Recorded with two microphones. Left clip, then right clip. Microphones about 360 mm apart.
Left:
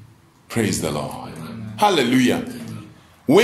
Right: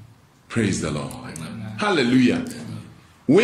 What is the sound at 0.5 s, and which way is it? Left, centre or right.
A man's voice, centre.